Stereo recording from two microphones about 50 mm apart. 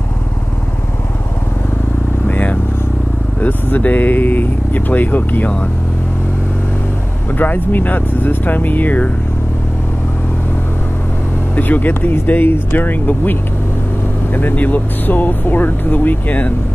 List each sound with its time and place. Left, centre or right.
2.2 s vehicle: left
3.3 s speech: left
7.3 s speech: left
11.5 s speech: left